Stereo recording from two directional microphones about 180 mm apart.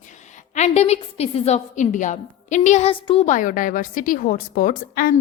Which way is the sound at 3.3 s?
50° left (ahead or behind).